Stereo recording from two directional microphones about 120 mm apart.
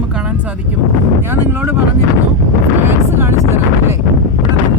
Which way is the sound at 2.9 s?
20° right (ahead or behind).